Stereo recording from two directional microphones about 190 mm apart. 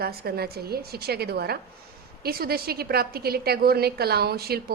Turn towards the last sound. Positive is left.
turn(degrees=-55)  # may be behind; listen again after turning